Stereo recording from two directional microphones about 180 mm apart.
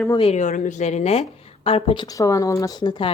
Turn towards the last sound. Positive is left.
turn(degrees=25)  # may be behind; listen again after turning